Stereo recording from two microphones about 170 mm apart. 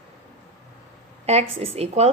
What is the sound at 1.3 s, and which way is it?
Speech, 35° right (ahead or behind).